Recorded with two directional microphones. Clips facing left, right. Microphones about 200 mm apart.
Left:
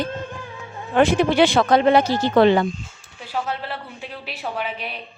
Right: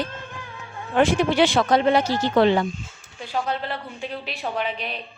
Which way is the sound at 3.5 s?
5° left (ahead or behind).